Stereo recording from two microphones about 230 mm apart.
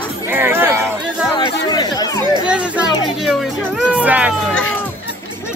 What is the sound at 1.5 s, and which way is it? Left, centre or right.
Chatter, centre.